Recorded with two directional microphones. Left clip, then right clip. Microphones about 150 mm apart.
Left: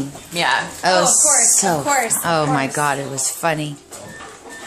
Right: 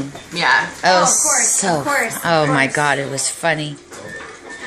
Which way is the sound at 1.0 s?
45° left (ahead or behind).